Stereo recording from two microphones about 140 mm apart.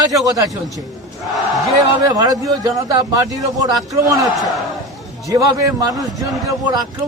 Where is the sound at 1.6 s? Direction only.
25° right (ahead or behind).